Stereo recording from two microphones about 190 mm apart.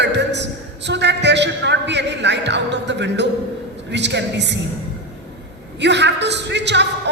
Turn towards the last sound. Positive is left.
turn(degrees=-65)  # may be behind; listen again after turning